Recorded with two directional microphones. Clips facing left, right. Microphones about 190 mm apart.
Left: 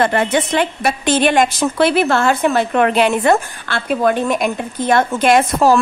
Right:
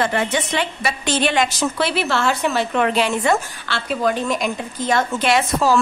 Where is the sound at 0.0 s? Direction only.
55° left (ahead or behind).